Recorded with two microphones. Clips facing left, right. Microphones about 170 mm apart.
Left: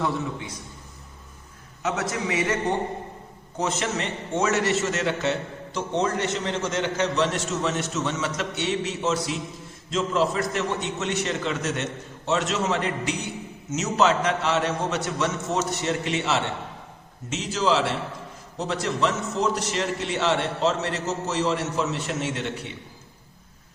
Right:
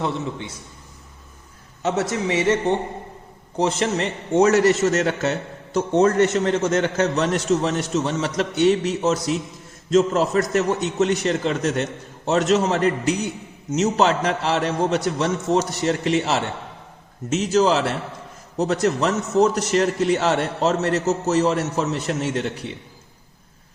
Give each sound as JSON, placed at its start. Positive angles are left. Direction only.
{"t": 0.0, "sound": "a man's voice", "side_deg": -25}
{"t": 1.8, "sound": "a man's voice", "side_deg": -30}
{"t": 3.6, "sound": "a man's voice", "side_deg": -35}